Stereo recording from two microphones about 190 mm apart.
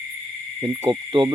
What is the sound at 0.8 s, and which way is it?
Speech, 25° right (ahead or behind).